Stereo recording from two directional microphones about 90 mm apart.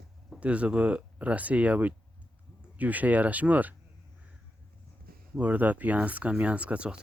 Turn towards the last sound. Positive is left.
turn(degrees=-15)  # may be behind; listen again after turning